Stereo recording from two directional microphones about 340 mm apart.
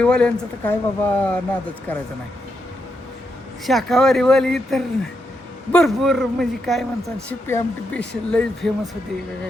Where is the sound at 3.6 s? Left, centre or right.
Centre.